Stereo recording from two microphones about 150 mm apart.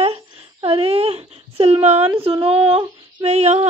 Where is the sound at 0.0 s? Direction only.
40° right (ahead or behind).